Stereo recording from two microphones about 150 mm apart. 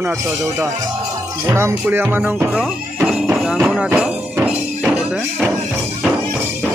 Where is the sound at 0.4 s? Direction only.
20° right (ahead or behind).